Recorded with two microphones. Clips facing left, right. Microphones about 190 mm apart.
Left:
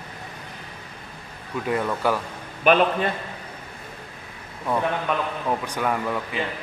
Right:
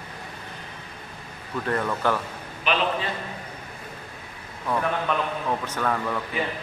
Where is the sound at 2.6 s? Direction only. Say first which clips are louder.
Left 7 dB; 50° left (ahead or behind).